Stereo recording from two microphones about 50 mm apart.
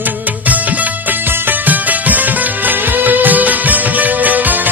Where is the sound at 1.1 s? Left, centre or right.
Right.